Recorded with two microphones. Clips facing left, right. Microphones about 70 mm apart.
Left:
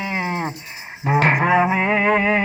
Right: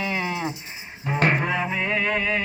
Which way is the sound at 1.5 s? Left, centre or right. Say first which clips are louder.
Left 9 dB; left.